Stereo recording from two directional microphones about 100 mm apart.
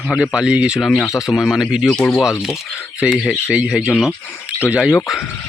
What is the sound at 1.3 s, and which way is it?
Speech, centre (ahead or behind).